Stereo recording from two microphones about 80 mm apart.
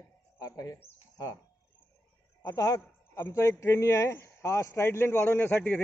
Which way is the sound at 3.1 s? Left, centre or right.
Left.